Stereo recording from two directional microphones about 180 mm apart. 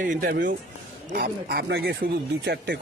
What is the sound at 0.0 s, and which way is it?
Speech, 50° right (ahead or behind).